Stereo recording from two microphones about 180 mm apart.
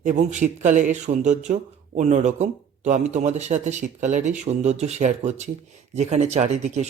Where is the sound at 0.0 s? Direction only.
40° right (ahead or behind).